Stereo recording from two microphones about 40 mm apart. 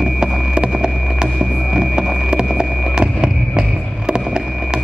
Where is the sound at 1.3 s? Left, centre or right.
Centre.